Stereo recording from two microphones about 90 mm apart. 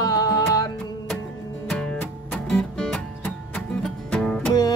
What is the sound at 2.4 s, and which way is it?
Music, 10° left (ahead or behind).